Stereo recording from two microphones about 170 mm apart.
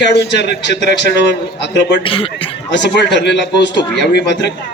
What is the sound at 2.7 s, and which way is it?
A man's voice, 90° left.